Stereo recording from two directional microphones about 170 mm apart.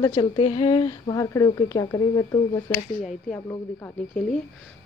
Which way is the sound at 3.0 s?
5° left (ahead or behind).